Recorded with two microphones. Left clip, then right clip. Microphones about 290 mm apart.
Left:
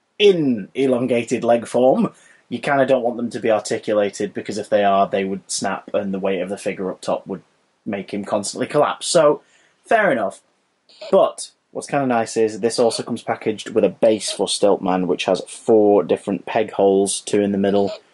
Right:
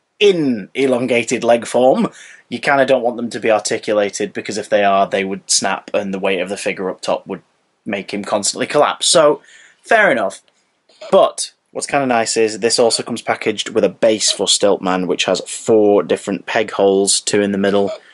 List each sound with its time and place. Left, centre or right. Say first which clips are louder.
0.2 s speech: right 2 dB; centre
3.0 s speech: right 3 dB; centre
3.3 s speech: right 4 dB; centre